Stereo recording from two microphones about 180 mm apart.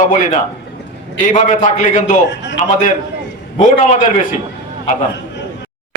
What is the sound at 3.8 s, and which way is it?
Speech, 45° left (ahead or behind).